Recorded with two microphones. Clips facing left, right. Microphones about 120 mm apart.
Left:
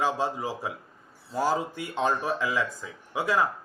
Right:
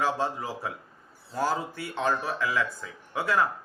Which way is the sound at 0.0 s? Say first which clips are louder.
Left 1 dB; 15° left (ahead or behind).